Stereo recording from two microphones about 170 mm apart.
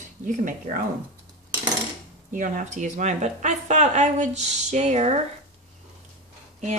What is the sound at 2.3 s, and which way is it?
A woman's voice, 50° right (ahead or behind).